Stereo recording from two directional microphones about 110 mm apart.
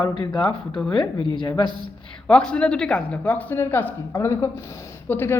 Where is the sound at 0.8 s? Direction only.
5° left (ahead or behind).